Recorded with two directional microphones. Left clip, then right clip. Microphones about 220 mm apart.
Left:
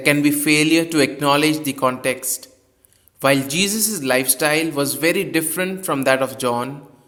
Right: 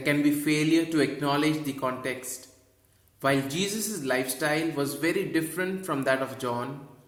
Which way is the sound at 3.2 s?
45° left (ahead or behind).